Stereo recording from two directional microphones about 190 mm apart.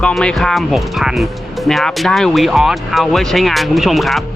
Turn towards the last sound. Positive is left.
turn(degrees=0)  # may be behind; listen again after turning